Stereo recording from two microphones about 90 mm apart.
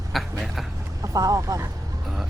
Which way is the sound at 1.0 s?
45° right (ahead or behind).